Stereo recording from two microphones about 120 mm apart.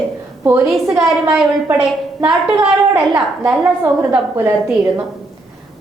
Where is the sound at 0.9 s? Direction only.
5° right (ahead or behind).